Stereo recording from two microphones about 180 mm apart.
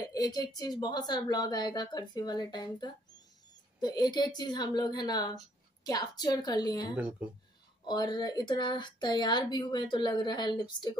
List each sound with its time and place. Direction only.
0.1 s speech: 20° left (ahead or behind)
7.0 s speech: 5° right (ahead or behind)
7.8 s speech: 25° left (ahead or behind)